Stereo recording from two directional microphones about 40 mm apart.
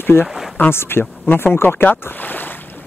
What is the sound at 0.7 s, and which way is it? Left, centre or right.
Speech, left.